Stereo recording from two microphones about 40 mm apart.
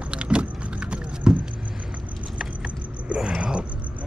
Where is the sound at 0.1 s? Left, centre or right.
Right.